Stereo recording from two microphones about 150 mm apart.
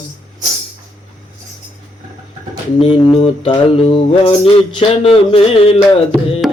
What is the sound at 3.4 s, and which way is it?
Mantra, 30° left (ahead or behind).